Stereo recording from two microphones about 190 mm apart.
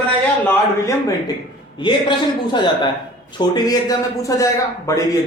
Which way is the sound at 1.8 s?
25° left (ahead or behind).